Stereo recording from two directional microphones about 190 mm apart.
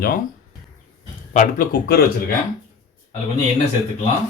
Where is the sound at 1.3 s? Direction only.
45° left (ahead or behind).